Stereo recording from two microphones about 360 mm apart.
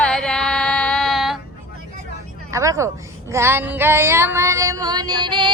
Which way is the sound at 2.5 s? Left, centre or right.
Centre.